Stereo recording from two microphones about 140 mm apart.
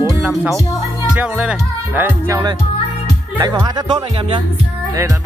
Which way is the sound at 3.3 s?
30° right (ahead or behind).